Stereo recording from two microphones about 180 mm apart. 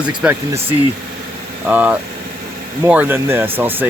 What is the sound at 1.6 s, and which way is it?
Speech, 10° right (ahead or behind).